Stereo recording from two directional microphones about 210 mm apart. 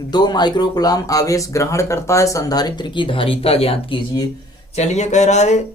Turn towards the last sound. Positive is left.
turn(degrees=35)  # may be behind; listen again after turning